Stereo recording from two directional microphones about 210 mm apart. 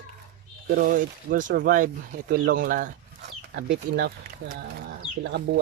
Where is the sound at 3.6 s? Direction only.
60° right (ahead or behind).